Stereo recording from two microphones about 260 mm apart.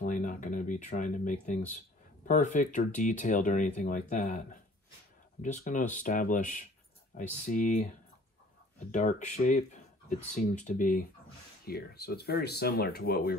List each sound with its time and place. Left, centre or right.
0.0 s speech: left